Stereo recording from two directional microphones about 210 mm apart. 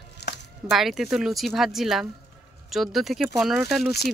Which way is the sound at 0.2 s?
50° left (ahead or behind).